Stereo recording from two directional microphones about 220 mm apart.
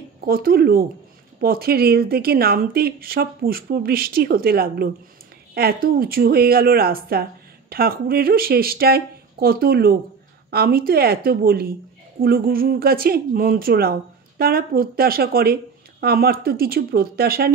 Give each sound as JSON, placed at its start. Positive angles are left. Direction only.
{"t": 0.2, "sound": "speech", "side_deg": -45}